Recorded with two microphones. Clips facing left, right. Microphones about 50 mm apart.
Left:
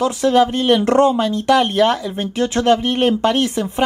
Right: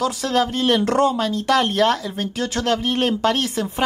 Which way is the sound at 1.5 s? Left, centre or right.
Centre.